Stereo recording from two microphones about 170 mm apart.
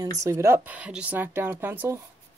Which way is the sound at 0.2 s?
15° right (ahead or behind).